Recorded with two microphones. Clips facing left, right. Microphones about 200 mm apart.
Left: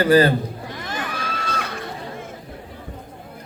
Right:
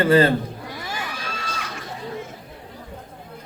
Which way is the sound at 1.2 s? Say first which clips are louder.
Left 4 dB; 60° left (ahead or behind).